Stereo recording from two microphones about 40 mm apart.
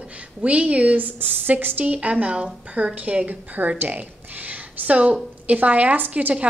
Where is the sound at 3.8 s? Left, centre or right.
Right.